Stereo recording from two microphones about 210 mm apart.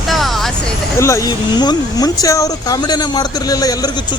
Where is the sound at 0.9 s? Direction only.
15° left (ahead or behind).